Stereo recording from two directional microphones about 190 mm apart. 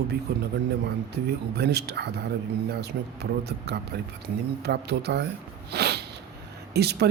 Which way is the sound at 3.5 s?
60° right (ahead or behind).